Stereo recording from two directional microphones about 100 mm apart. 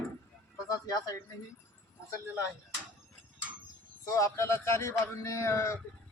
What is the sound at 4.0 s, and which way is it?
A man's voice, 30° left (ahead or behind).